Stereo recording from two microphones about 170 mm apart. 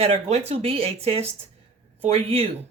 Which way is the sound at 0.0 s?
35° right (ahead or behind).